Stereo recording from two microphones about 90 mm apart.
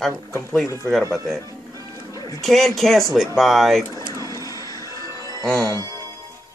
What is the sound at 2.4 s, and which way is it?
Speech, centre (ahead or behind).